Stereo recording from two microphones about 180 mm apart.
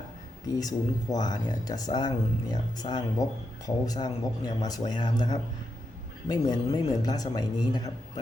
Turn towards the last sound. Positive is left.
turn(degrees=20)  # may be behind; listen again after turning